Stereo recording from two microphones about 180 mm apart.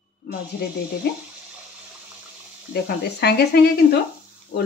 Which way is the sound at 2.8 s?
65° left (ahead or behind).